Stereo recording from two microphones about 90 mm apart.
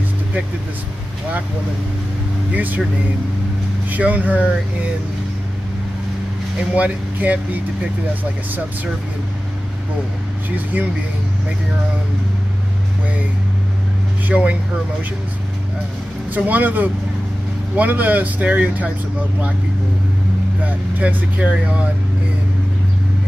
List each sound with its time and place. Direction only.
2.5 s speech: 20° right (ahead or behind)
3.9 s speech: 15° right (ahead or behind)
6.7 s speech: 15° right (ahead or behind)
10.5 s speech: 20° right (ahead or behind)
14.2 s speech: 15° right (ahead or behind)
16.3 s speech: 20° right (ahead or behind)
20.6 s speech: 15° right (ahead or behind)